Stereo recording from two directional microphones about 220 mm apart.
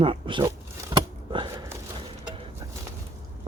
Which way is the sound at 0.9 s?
20° right (ahead or behind).